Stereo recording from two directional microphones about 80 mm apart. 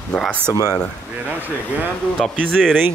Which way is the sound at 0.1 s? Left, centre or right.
Centre.